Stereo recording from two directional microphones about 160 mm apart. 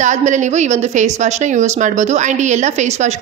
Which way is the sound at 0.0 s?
50° right (ahead or behind).